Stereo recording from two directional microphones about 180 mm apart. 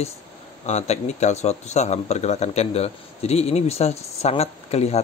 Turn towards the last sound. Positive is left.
turn(degrees=35)  # may be behind; listen again after turning